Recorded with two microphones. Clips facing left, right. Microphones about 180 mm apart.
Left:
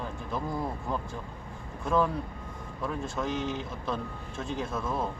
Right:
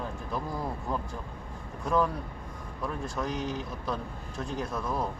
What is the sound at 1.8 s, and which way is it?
Speech, centre (ahead or behind).